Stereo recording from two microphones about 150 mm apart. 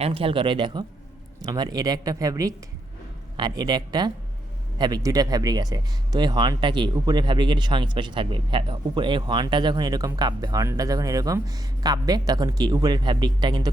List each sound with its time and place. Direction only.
0.0 s speech: 40° right (ahead or behind)